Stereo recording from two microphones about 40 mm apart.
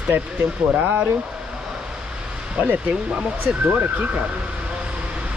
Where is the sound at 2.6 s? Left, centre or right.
Right.